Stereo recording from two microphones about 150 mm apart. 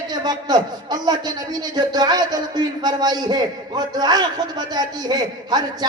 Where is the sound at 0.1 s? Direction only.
30° right (ahead or behind).